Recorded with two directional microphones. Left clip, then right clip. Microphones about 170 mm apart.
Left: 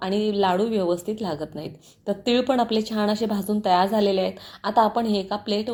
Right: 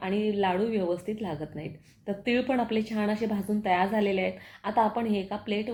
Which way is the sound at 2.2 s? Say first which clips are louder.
Left 5 dB; 5° left (ahead or behind).